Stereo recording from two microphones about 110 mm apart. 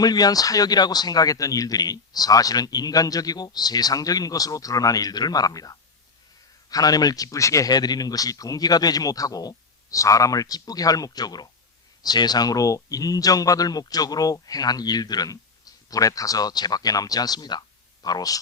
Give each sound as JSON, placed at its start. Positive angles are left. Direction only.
{"t": 0.0, "sound": "speech", "side_deg": 35}